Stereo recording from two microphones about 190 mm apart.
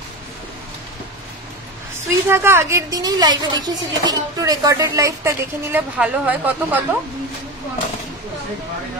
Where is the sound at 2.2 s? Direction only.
15° right (ahead or behind).